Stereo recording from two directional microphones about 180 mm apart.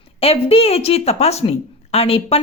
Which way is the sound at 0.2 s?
35° left (ahead or behind).